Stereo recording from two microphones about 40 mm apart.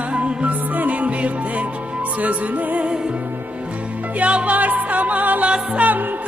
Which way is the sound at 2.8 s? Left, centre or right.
Right.